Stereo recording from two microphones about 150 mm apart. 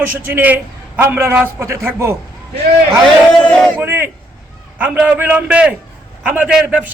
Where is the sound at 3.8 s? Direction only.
15° right (ahead or behind).